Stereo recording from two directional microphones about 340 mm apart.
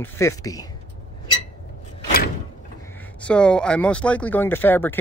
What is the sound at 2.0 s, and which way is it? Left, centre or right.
Door, left.